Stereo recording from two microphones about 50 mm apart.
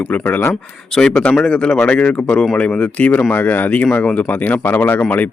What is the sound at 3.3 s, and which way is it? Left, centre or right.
Speech, left.